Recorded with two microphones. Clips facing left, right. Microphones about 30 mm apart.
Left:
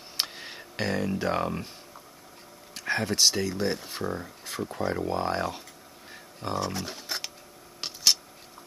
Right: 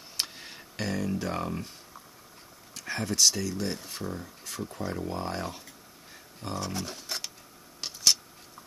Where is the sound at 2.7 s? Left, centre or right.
Left.